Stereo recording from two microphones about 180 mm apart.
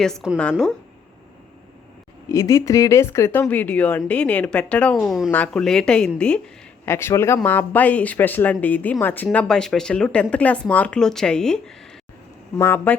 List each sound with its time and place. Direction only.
0.0 s speech: centre (ahead or behind)
2.3 s speech: 15° left (ahead or behind)